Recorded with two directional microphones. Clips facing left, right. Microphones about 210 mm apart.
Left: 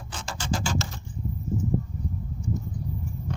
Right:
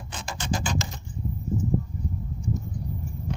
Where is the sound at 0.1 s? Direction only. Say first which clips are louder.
Even; 15° right (ahead or behind).